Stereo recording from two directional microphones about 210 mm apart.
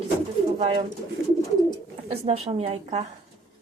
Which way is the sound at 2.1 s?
30° right (ahead or behind).